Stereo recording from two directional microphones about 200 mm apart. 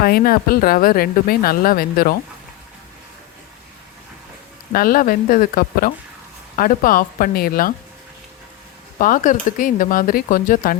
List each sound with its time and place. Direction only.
0.0 s a woman's voice: 50° left (ahead or behind)
4.7 s a woman's voice: 45° left (ahead or behind)
9.0 s a woman's voice: 40° left (ahead or behind)